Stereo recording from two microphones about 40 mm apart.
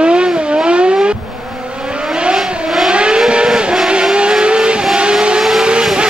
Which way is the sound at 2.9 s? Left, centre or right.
Right.